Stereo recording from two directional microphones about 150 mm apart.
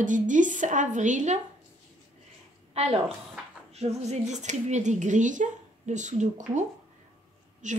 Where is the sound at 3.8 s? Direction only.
45° right (ahead or behind).